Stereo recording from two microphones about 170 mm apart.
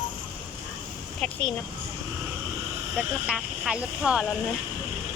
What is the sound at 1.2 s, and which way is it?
Speech, 5° left (ahead or behind).